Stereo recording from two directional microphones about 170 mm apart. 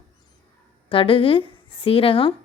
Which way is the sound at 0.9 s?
30° left (ahead or behind).